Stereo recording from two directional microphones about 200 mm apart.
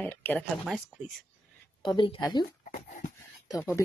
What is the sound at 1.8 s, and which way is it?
Speech, 25° left (ahead or behind).